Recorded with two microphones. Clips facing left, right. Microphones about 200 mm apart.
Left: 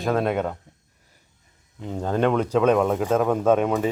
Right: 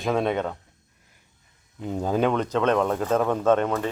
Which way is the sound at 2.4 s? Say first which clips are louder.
Left 3 dB; 10° left (ahead or behind).